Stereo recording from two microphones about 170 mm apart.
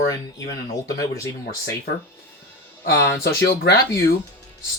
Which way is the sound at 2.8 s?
65° left (ahead or behind).